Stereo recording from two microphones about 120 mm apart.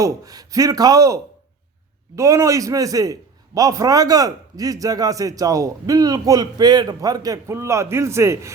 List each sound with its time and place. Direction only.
0.0 s a man's voice: 30° right (ahead or behind)